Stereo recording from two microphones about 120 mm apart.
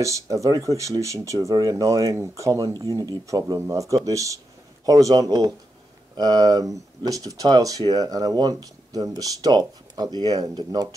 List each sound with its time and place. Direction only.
0.0 s speech: 25° right (ahead or behind)